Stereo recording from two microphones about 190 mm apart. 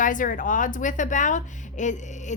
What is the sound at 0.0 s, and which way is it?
A woman's voice, 45° left (ahead or behind).